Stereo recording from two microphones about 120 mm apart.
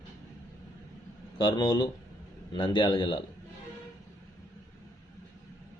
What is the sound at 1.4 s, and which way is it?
A man's voice, 40° left (ahead or behind).